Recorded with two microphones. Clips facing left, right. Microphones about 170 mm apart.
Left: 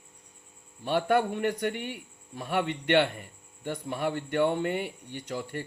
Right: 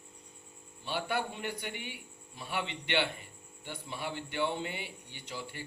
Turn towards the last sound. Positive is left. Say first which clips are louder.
# left 8 dB
turn(degrees=45)  # may be behind; listen again after turning